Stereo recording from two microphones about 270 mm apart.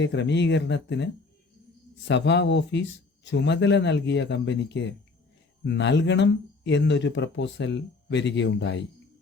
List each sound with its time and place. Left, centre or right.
0.0 s speech: left
2.0 s speech: left